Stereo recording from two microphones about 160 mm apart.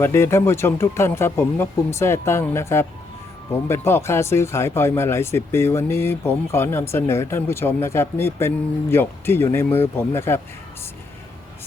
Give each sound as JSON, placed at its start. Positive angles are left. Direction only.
{"t": 0.0, "sound": "speech", "side_deg": 15}